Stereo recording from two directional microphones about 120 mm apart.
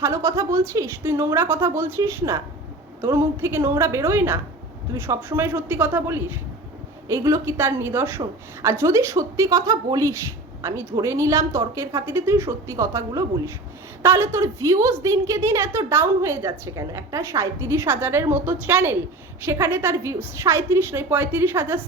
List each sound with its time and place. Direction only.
0.0 s a woman's voice: 25° right (ahead or behind)